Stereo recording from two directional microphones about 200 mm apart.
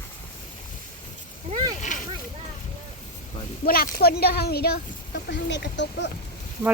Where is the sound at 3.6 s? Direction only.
50° left (ahead or behind).